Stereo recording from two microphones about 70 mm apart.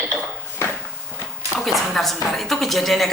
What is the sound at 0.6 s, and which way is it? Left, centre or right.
Walk, left.